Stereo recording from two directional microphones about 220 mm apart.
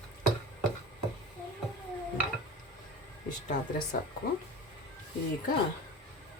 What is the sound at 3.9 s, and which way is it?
Speech, 40° left (ahead or behind).